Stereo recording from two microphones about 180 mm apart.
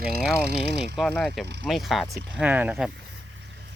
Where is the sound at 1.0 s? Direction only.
5° left (ahead or behind).